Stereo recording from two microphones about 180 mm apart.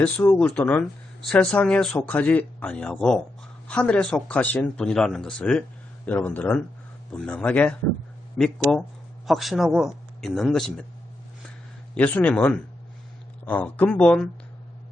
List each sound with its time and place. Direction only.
0.0 s speech: 5° left (ahead or behind)
11.9 s speech: 10° left (ahead or behind)